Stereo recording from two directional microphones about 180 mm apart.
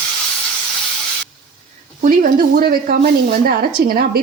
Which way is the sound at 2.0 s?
50° right (ahead or behind).